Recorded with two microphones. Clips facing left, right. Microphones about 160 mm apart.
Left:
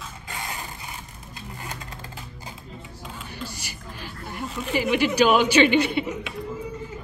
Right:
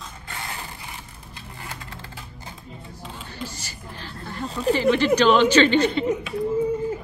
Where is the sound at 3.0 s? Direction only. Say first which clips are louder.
Even; 5° left (ahead or behind).